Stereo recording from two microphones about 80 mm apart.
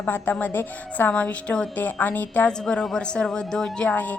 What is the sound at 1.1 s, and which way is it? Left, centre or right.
Speech, centre.